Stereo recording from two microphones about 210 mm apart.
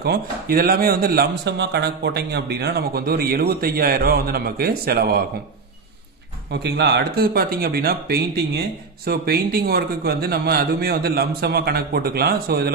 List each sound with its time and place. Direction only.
0.0 s speech: 45° right (ahead or behind)
6.5 s speech: 50° right (ahead or behind)